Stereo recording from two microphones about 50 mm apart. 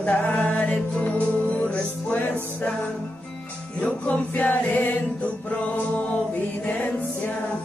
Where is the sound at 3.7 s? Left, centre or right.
Left.